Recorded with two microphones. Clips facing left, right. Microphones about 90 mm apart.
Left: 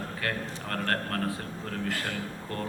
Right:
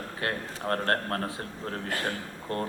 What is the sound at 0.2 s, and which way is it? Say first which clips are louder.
A man's voice: right 3 dB; 30° right (ahead or behind).